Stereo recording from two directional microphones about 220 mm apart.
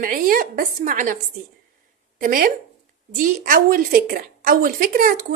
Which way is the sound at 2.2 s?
40° right (ahead or behind).